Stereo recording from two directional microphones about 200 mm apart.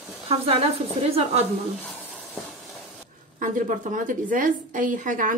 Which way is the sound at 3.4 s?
40° right (ahead or behind).